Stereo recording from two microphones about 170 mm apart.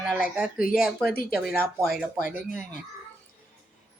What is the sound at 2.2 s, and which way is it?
Speech, 50° left (ahead or behind).